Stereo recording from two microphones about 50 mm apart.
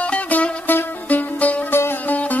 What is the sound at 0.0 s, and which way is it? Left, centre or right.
Music, left.